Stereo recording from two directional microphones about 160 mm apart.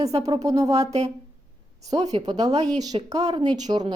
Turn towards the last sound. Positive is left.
turn(degrees=-25)  # may be behind; listen again after turning